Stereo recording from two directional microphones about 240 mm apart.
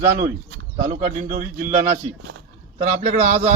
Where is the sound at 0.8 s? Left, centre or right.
Right.